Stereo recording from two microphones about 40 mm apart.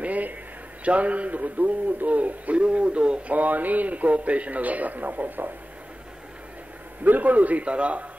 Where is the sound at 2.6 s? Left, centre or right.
Right.